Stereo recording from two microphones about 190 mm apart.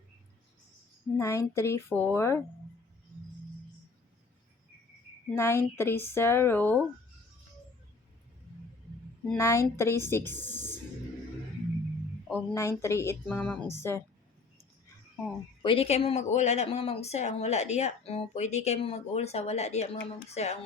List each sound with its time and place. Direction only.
1.1 s speech: 15° left (ahead or behind)
5.4 s speech: 15° left (ahead or behind)
9.3 s speech: 15° left (ahead or behind)
12.3 s speech: 15° left (ahead or behind)
15.6 s speech: 30° left (ahead or behind)